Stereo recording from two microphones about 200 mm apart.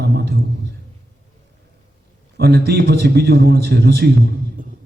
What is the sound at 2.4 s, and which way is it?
A man's voice, 55° right (ahead or behind).